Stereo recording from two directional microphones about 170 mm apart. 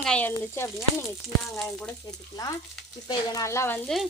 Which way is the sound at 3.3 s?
15° left (ahead or behind).